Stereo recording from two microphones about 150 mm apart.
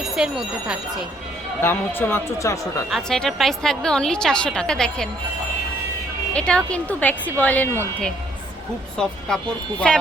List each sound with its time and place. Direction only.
0.0 s a woman's voice: 5° right (ahead or behind)
1.6 s speech: 15° left (ahead or behind)
2.9 s a woman's voice: 5° left (ahead or behind)
6.3 s speech: 5° left (ahead or behind)
9.8 s a woman's voice: 5° left (ahead or behind)